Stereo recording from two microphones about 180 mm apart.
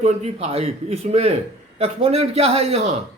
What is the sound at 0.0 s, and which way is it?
A man's voice, 35° right (ahead or behind).